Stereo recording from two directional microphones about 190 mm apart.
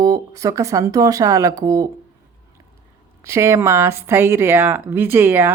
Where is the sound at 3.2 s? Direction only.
15° right (ahead or behind).